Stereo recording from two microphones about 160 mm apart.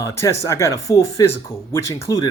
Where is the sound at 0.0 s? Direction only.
15° left (ahead or behind).